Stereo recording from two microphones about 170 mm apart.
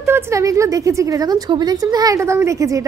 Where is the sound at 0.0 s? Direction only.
15° right (ahead or behind).